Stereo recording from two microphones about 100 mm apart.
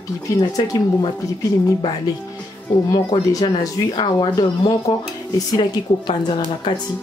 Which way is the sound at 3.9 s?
50° left (ahead or behind).